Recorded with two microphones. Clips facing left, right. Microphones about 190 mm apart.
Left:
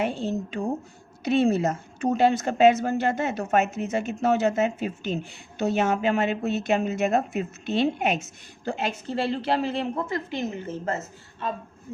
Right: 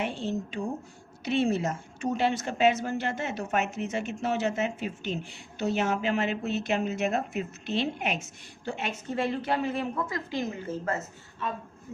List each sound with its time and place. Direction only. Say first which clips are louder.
0.0 s speech: left 4 dB; 40° left (ahead or behind)
8.8 s a woman's voice: left 2 dB; 35° left (ahead or behind)